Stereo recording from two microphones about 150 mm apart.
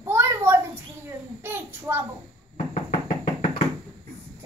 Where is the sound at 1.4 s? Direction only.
15° right (ahead or behind).